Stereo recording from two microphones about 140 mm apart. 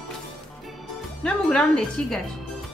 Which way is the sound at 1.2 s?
5° left (ahead or behind).